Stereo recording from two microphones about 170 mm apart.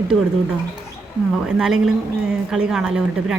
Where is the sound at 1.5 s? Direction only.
5° right (ahead or behind).